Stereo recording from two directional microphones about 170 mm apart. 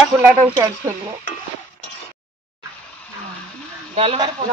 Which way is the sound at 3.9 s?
35° right (ahead or behind).